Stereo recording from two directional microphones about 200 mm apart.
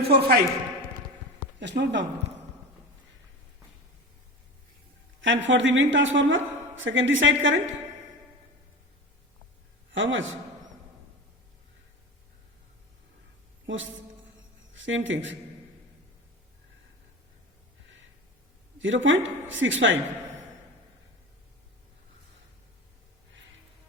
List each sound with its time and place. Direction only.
0.1 s a man's voice: 50° right (ahead or behind)
1.5 s speech: 60° right (ahead or behind)
5.2 s a woman's voice: 65° right (ahead or behind)
9.9 s a woman's voice: 70° right (ahead or behind)
13.7 s a woman's voice: 70° right (ahead or behind)
18.8 s a woman's voice: 70° right (ahead or behind)